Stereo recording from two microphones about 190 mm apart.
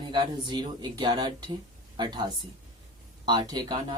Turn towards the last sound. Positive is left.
turn(degrees=-20)  # may be behind; listen again after turning